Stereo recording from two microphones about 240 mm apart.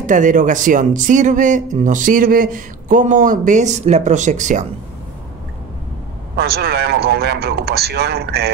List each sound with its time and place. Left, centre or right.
0.0 s speech: right
6.3 s speech: right